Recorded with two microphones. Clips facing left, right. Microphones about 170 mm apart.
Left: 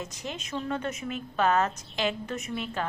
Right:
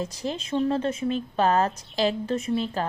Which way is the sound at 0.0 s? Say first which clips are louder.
Right 7 dB; 30° right (ahead or behind).